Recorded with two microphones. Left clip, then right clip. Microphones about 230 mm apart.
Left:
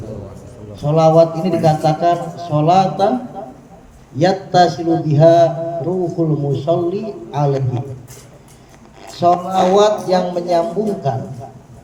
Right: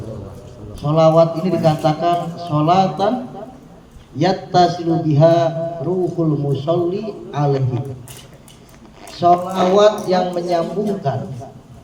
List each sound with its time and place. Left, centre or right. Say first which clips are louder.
0.8 s a man's voice: left 1 dB; left
4.2 s a man's voice: left 2 dB; left
9.0 s a man's voice: even; left